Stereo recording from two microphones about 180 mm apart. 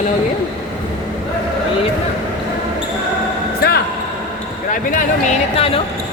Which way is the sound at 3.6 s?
60° left (ahead or behind).